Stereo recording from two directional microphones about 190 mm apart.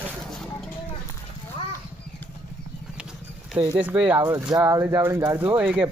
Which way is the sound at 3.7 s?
5° right (ahead or behind).